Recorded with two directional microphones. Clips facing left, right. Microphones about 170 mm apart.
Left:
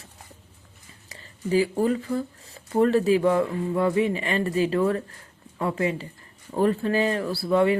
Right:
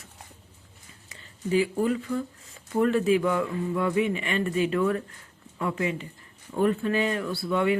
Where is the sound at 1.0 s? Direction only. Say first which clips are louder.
Left 2 dB; 35° left (ahead or behind).